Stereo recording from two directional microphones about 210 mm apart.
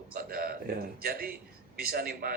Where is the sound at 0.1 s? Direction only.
40° right (ahead or behind).